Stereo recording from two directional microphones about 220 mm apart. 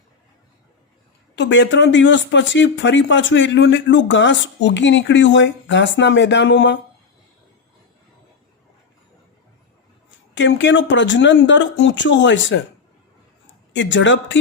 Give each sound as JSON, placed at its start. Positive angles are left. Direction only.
{"t": 1.4, "sound": "speech", "side_deg": 55}
{"t": 10.3, "sound": "speech", "side_deg": 55}
{"t": 13.7, "sound": "speech", "side_deg": 55}